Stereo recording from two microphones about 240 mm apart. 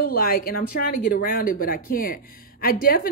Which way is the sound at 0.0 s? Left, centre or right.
Left.